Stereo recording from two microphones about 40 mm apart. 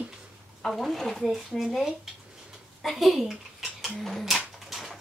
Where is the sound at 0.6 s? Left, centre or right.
Centre.